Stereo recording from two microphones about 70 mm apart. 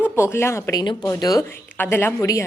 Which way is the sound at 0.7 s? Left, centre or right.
Left.